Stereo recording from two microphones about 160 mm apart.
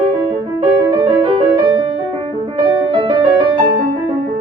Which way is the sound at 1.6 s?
35° right (ahead or behind).